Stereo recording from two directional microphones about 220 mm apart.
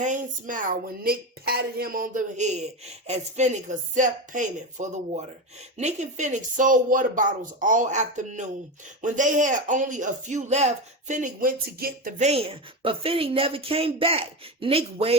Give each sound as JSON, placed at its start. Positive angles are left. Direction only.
{"t": 0.0, "sound": "speech", "side_deg": -35}